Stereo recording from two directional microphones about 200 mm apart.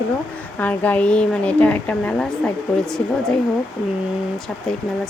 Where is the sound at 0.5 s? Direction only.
5° left (ahead or behind).